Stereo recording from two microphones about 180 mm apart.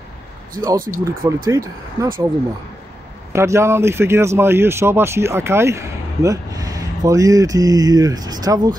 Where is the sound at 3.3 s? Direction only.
15° right (ahead or behind).